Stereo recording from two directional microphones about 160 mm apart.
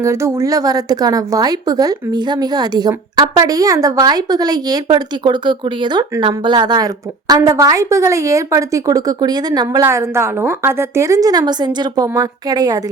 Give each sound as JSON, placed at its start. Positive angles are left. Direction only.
{"t": 0.0, "sound": "a woman's voice", "side_deg": -15}